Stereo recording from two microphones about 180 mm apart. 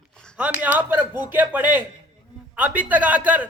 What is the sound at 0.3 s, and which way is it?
A man's voice, 10° right (ahead or behind).